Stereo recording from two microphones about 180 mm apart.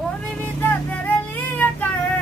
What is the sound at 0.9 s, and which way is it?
Child singing, 10° left (ahead or behind).